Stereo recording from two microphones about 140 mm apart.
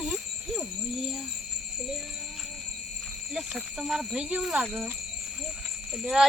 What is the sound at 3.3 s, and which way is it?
A child's voice, 5° right (ahead or behind).